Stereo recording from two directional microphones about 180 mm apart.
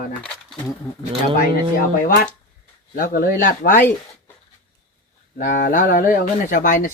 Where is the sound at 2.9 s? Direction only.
50° left (ahead or behind).